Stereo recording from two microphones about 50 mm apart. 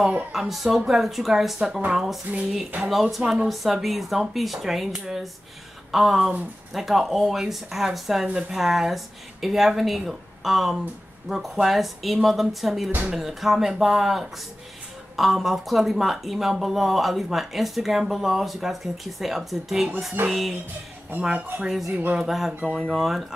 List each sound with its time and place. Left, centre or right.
0.3 s speech: centre
21.2 s speech: centre
21.6 s speech: centre
22.7 s speech: left
22.9 s speech: centre